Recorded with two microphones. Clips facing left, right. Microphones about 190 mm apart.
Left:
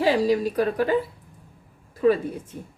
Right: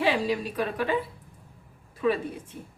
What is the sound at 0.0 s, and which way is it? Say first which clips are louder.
Speech: left 5 dB; 40° left (ahead or behind).